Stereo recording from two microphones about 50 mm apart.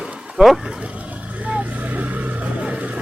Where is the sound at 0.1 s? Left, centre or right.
Centre.